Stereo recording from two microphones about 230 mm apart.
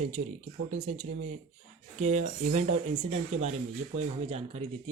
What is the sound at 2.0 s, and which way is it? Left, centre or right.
Speech, right.